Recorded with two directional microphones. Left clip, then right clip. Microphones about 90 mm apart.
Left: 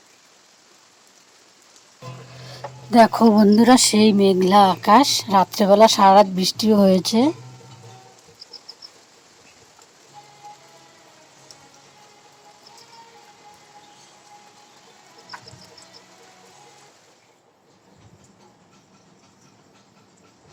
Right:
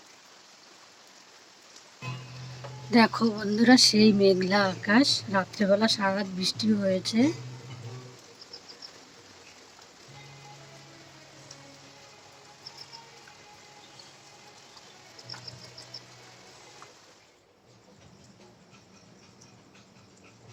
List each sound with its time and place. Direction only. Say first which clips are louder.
2.9 s speech: left 10 dB; 45° left (ahead or behind)